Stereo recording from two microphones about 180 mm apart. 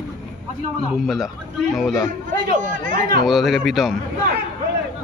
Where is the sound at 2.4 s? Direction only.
50° right (ahead or behind).